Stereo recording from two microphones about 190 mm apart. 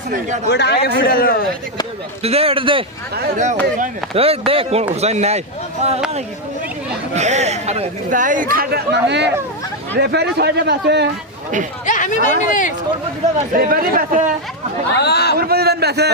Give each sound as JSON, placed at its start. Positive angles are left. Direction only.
{"t": 0.5, "sound": "speech", "side_deg": 65}
{"t": 0.9, "sound": "a man's voice", "side_deg": 50}
{"t": 2.2, "sound": "a man's voice", "side_deg": -30}
{"t": 3.3, "sound": "speech", "side_deg": -40}
{"t": 7.2, "sound": "speech", "side_deg": -35}
{"t": 11.9, "sound": "speech", "side_deg": 40}
{"t": 13.5, "sound": "speech", "side_deg": -50}
{"t": 14.9, "sound": "speech", "side_deg": 60}
{"t": 15.4, "sound": "speech", "side_deg": -55}